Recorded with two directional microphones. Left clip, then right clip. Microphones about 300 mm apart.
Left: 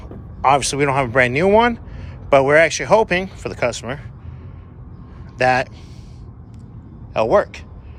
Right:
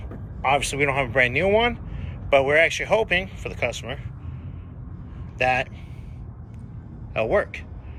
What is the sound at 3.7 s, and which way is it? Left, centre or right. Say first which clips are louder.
Speech: left 5 dB; left.